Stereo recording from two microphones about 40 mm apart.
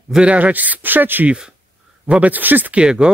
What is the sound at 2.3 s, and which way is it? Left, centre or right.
Speech, right.